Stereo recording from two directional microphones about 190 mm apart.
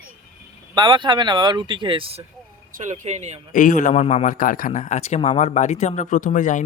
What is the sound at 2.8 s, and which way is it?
Speech, 40° right (ahead or behind).